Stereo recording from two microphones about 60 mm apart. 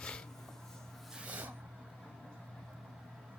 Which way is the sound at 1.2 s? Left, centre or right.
Right.